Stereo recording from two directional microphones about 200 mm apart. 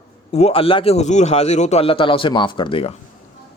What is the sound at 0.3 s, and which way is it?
A man's voice, 30° left (ahead or behind).